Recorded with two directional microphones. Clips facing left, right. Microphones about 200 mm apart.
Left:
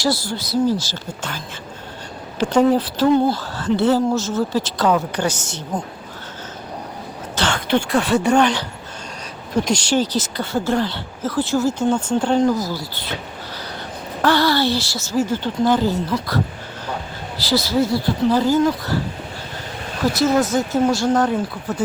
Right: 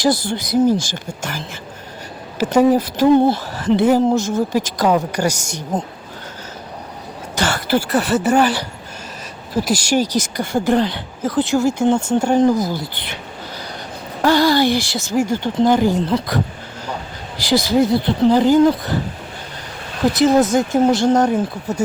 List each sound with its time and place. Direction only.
0.0 s speech: 20° right (ahead or behind)
2.4 s speech: 10° right (ahead or behind)
3.0 s speech: 20° right (ahead or behind)
7.3 s speech: 5° right (ahead or behind)
14.2 s speech: 15° right (ahead or behind)
17.4 s speech: 15° right (ahead or behind)
20.1 s speech: 15° right (ahead or behind)